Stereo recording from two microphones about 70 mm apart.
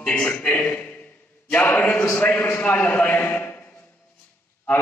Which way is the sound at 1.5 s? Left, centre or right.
Left.